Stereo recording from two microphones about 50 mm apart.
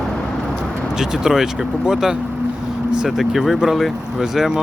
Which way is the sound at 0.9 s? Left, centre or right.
Centre.